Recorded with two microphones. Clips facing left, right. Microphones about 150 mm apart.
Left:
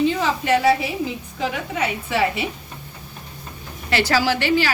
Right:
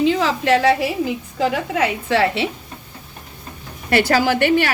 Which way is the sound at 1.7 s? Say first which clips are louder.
Right 5 dB; 90° right.